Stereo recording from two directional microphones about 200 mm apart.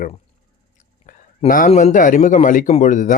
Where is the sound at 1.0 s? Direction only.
40° left (ahead or behind).